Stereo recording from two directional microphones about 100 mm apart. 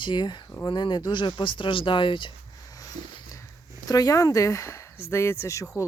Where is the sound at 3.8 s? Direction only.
40° left (ahead or behind).